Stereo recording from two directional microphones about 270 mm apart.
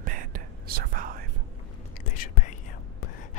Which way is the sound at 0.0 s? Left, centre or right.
Right.